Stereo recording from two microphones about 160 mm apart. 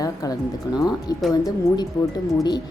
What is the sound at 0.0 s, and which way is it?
Music, 20° left (ahead or behind).